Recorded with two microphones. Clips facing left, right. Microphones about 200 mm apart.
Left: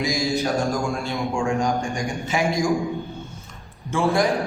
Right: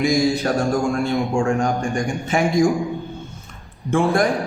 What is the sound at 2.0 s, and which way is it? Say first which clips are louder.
Speech: right 4 dB; 50° right (ahead or behind).